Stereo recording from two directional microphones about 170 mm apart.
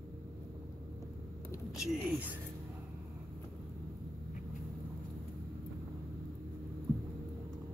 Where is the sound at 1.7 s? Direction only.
Centre (ahead or behind).